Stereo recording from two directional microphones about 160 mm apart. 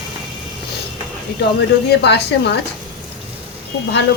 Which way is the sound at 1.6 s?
90° left.